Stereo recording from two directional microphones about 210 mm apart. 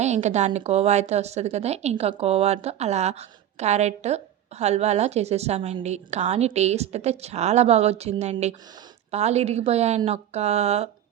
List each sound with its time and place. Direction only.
0.0 s speech: 35° right (ahead or behind)